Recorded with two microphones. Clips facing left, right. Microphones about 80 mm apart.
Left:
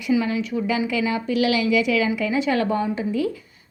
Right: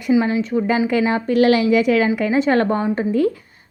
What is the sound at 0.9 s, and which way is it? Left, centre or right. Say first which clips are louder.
A woman's voice: right 5 dB; right.